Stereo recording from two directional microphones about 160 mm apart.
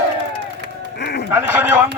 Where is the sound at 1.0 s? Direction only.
90° left.